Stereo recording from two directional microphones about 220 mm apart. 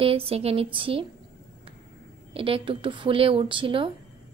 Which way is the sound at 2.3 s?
25° right (ahead or behind).